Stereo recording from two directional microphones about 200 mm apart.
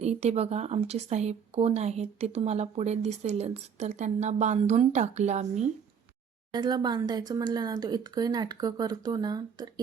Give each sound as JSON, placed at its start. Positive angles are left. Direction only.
{"t": 0.0, "sound": "speech", "side_deg": -35}
{"t": 6.5, "sound": "speech", "side_deg": -20}